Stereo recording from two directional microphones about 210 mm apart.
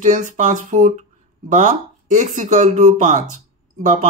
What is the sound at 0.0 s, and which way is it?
Speech, 35° right (ahead or behind).